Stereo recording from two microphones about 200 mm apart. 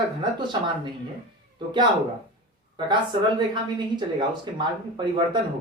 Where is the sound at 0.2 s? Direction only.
25° right (ahead or behind).